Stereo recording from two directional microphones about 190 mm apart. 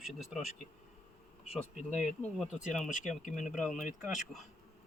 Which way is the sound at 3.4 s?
Centre (ahead or behind).